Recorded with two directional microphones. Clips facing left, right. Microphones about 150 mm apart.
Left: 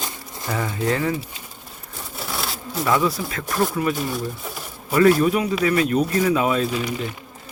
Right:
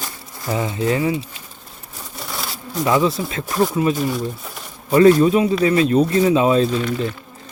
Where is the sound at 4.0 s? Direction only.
Centre (ahead or behind).